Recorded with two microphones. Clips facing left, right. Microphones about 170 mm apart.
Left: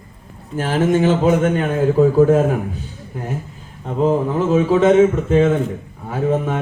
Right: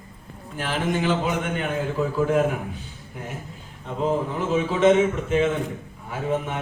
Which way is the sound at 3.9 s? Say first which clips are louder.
Left 7 dB; 40° left (ahead or behind).